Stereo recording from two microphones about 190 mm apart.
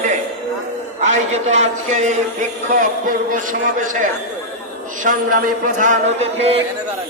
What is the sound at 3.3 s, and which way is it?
Speech, 45° right (ahead or behind).